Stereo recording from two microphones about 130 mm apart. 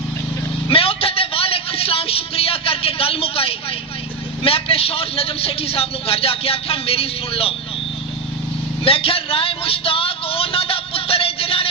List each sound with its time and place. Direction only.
0.7 s vehicle: 45° left (ahead or behind)
4.4 s a man's voice: 45° left (ahead or behind)
8.8 s a sound: 45° left (ahead or behind)